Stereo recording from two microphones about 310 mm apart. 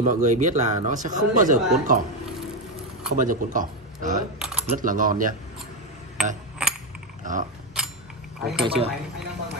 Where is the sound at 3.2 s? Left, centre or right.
Right.